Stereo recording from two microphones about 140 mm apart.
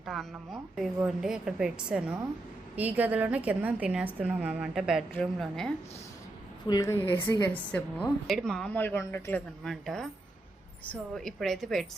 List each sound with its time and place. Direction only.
0.0 s a woman's voice: centre (ahead or behind)
6.7 s a woman's voice: 25° left (ahead or behind)
9.6 s a woman's voice: centre (ahead or behind)